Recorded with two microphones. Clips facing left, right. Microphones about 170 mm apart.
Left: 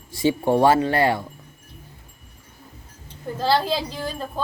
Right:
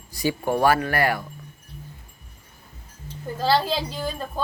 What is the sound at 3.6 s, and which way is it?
Speech, centre (ahead or behind).